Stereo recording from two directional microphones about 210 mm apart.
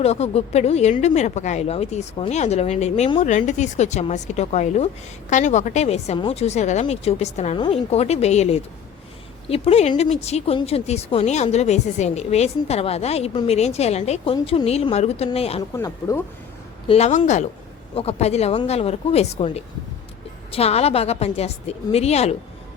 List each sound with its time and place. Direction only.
0.0 s a woman's voice: 30° left (ahead or behind)
15.7 s speech: 15° left (ahead or behind)
16.9 s a woman's voice: 35° left (ahead or behind)